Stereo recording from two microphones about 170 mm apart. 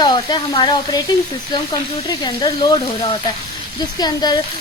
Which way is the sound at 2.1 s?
25° left (ahead or behind).